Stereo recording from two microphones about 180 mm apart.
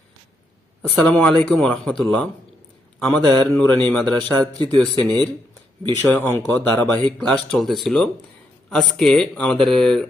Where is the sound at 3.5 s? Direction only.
10° left (ahead or behind).